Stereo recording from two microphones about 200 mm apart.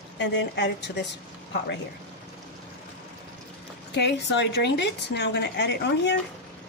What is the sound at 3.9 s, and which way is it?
A woman's voice, 55° left (ahead or behind).